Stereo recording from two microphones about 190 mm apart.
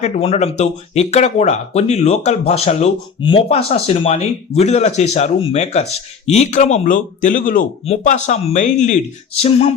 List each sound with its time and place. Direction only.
0.0 s speech: 35° left (ahead or behind)